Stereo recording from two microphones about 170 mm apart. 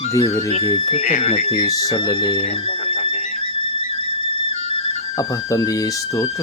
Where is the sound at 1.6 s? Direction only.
20° left (ahead or behind).